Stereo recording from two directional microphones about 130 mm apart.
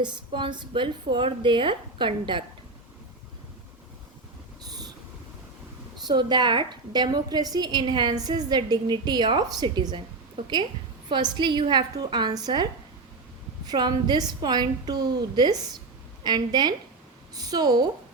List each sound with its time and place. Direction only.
0.0 s a woman's voice: 35° right (ahead or behind)
4.7 s owl: 30° right (ahead or behind)
6.1 s a woman's voice: 35° right (ahead or behind)
11.1 s a woman's voice: 35° right (ahead or behind)
13.7 s a woman's voice: 35° right (ahead or behind)